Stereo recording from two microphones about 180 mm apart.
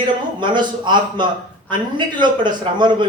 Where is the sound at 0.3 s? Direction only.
25° right (ahead or behind).